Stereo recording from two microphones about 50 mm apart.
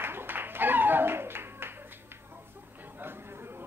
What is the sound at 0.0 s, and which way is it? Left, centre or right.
Clapping, right.